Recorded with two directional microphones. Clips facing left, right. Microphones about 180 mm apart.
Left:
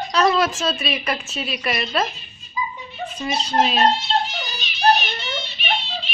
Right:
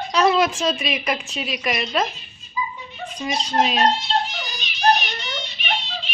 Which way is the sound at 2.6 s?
15° left (ahead or behind).